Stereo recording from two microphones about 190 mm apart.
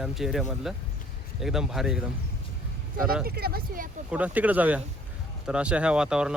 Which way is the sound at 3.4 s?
55° right (ahead or behind).